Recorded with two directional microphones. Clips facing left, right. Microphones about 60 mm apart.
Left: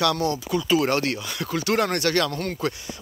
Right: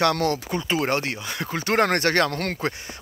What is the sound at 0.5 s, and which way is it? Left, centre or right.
Speech, right.